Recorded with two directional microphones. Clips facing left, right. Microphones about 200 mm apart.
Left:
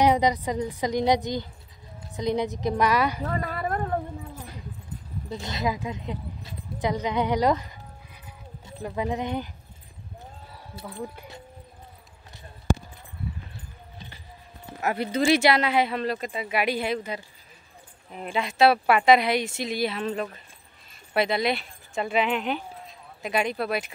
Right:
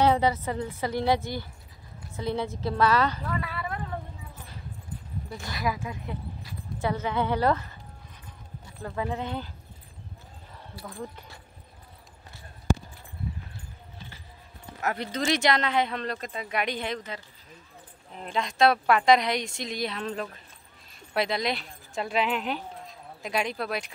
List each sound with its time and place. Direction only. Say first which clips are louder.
0.0 s speech: left 2 dB; 15° left (ahead or behind)
3.3 s a sound: left 4 dB; 45° left (ahead or behind)
5.3 s speech: left 3 dB; 20° left (ahead or behind)
14.8 s speech: left 5 dB; 10° left (ahead or behind)